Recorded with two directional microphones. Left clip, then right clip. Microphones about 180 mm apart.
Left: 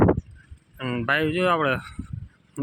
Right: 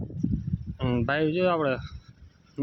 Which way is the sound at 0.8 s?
20° right (ahead or behind).